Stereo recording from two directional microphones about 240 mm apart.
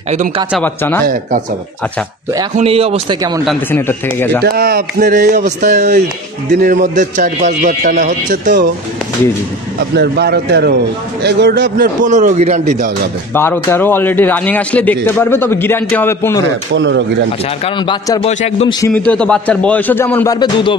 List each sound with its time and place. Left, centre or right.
0.5 s speech: centre
2.5 s a man's voice: right
3.4 s a man's voice: centre
4.4 s a man's voice: right
9.9 s a man's voice: right
13.3 s a man's voice: centre
16.7 s speech: right
17.6 s a man's voice: centre
18.8 s a man's voice: centre